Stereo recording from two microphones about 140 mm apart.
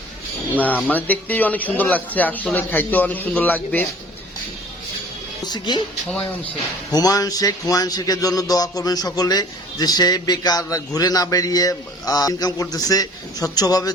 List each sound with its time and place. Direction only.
0.5 s speech: 10° left (ahead or behind)
5.5 s speech: 30° left (ahead or behind)
6.9 s speech: 25° left (ahead or behind)